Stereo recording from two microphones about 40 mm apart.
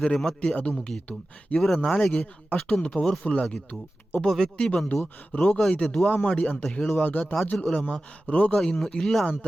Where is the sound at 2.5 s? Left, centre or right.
Centre.